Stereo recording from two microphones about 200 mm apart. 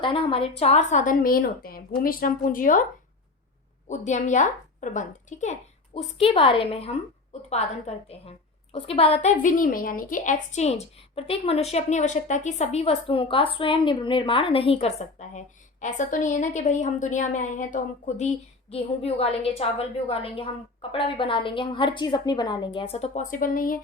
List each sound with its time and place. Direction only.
0.0 s a woman's voice: 25° left (ahead or behind); by 2.8 s 45° left (ahead or behind)
3.8 s a woman's voice: 35° left (ahead or behind)